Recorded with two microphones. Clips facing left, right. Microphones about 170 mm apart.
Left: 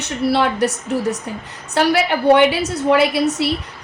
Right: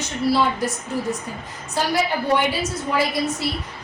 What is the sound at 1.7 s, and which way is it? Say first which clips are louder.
A woman's voice: left 5 dB; 70° left (ahead or behind).